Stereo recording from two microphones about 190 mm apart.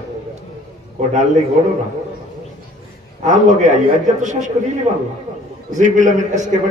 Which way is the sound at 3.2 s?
40° right (ahead or behind).